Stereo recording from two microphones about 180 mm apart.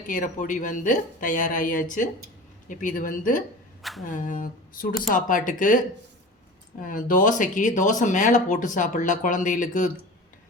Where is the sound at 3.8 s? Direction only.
Centre (ahead or behind).